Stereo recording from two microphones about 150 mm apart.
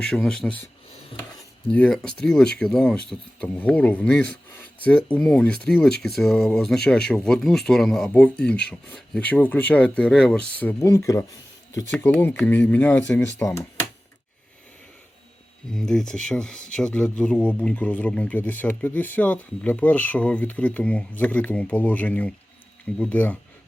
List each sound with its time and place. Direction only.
0.0 s speech: 5° left (ahead or behind)
1.7 s speech: 5° left (ahead or behind)
10.8 s speech: 20° left (ahead or behind)
15.7 s speech: 5° left (ahead or behind)